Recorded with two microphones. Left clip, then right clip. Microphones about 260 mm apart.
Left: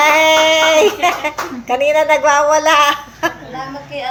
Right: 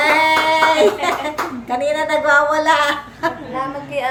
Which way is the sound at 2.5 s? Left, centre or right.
Centre.